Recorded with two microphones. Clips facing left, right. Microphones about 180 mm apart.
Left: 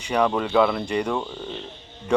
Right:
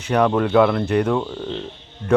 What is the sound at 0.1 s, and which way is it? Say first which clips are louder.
Speech: right 4 dB; 5° right (ahead or behind).